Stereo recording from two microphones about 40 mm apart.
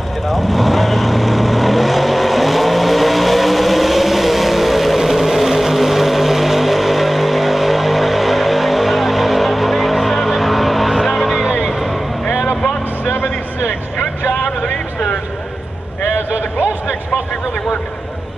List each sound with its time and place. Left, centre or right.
0.3 s vehicle: centre
13.0 s vehicle: left
16.2 s a sound: left